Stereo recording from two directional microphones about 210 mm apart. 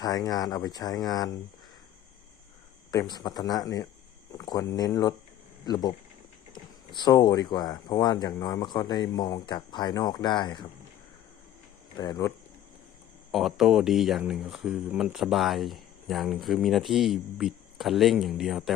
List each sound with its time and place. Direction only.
0.0 s speech: 15° left (ahead or behind)
2.9 s speech: 20° left (ahead or behind)
11.9 s speech: 15° left (ahead or behind)
13.3 s speech: centre (ahead or behind)